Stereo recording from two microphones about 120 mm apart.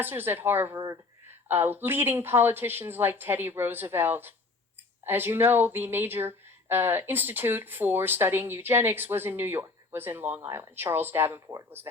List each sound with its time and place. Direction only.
0.0 s speech: 15° right (ahead or behind)